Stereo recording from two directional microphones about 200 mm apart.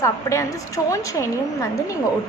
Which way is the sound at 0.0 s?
15° left (ahead or behind).